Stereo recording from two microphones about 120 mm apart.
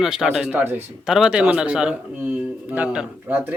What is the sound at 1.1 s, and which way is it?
A man's voice, 5° right (ahead or behind).